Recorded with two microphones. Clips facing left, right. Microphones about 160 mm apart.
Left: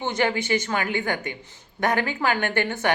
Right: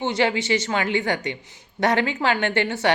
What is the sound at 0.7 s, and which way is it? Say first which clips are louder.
A woman's voice: right 3 dB; 25° right (ahead or behind).